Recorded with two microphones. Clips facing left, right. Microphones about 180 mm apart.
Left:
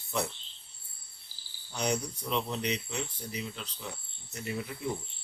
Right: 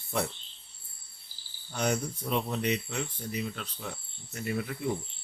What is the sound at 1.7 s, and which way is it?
Speech, 50° right (ahead or behind).